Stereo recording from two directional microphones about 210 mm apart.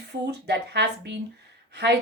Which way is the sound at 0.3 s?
55° right (ahead or behind).